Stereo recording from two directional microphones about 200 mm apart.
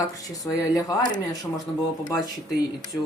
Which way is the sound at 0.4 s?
15° left (ahead or behind).